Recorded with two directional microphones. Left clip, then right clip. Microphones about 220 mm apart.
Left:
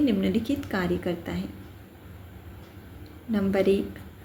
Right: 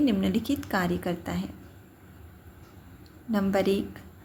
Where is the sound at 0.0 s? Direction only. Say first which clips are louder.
Left 1 dB; 30° right (ahead or behind).